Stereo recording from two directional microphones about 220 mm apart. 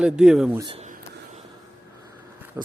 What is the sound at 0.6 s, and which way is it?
Speech, 25° right (ahead or behind).